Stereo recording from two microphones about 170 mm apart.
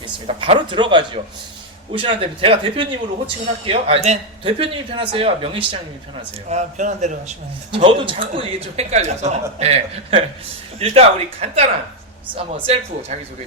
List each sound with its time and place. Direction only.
0.3 s a man's voice: 35° right (ahead or behind)
6.5 s a man's voice: 45° right (ahead or behind)